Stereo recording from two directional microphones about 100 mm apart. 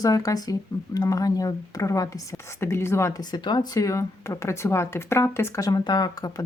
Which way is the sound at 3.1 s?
50° left (ahead or behind).